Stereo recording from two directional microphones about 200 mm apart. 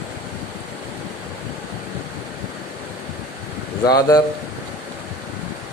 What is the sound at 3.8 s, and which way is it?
Speech, 20° left (ahead or behind).